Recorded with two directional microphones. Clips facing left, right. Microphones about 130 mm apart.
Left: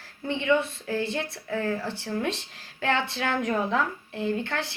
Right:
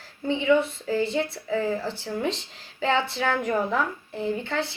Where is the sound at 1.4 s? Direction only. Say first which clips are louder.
Right 3 dB; 15° right (ahead or behind).